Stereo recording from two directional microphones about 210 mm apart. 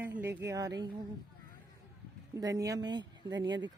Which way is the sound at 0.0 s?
10° right (ahead or behind).